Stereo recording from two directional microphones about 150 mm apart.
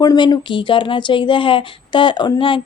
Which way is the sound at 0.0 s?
25° left (ahead or behind).